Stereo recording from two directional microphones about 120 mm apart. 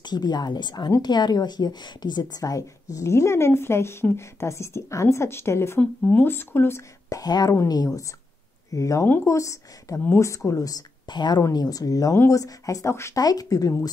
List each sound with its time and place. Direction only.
0.0 s a woman's voice: 35° left (ahead or behind)